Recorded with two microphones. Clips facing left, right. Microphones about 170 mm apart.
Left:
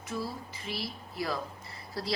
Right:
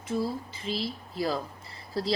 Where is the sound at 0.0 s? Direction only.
25° right (ahead or behind).